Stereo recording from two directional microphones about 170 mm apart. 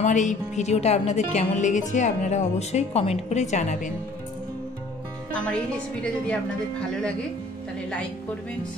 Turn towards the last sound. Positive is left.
turn(degrees=5)  # may be behind; listen again after turning